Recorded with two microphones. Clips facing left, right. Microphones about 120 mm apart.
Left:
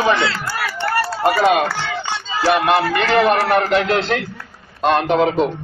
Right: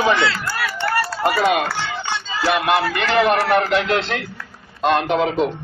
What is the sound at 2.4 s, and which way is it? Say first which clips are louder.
Speech: left 3 dB; 30° left (ahead or behind).